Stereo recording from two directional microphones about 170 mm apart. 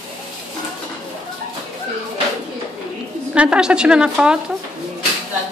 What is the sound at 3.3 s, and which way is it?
A woman's voice, 5° right (ahead or behind).